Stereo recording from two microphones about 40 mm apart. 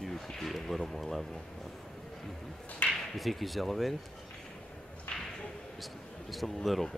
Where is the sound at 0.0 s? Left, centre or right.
Centre.